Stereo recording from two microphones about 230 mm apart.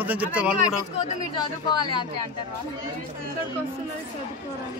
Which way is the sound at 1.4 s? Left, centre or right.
Centre.